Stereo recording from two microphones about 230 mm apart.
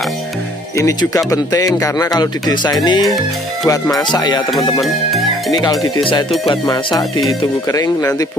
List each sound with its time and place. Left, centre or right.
0.7 s speech: centre
4.1 s music: centre
4.5 s speech: centre
5.5 s speech: centre
6.4 s music: centre
7.6 s speech: centre